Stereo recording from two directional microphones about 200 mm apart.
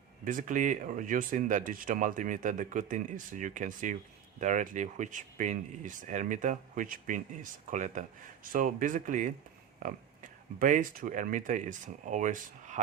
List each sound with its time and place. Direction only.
0.3 s speech: 40° right (ahead or behind)